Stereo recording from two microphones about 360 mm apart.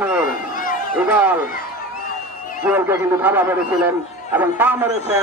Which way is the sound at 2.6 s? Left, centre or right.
Centre.